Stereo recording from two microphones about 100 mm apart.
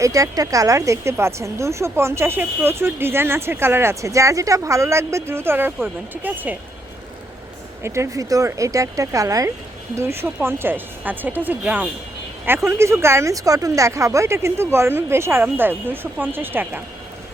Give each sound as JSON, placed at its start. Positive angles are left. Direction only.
{"t": 0.0, "sound": "speech", "side_deg": -35}
{"t": 7.8, "sound": "speech", "side_deg": -25}